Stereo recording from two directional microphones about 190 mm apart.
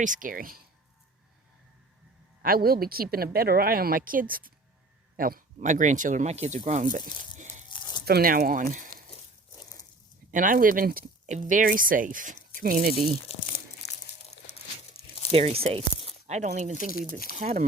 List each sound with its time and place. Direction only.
0.0 s speech: 45° right (ahead or behind)
2.4 s speech: 50° right (ahead or behind)
7.3 s a sound: 40° right (ahead or behind)
7.7 s a sound: 20° left (ahead or behind)
8.0 s speech: 50° right (ahead or behind)
10.3 s speech: 45° right (ahead or behind)
13.3 s speech: 35° left (ahead or behind)
15.3 s speech: 30° right (ahead or behind)